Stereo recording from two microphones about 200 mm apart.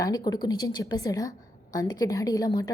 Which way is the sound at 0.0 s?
20° left (ahead or behind).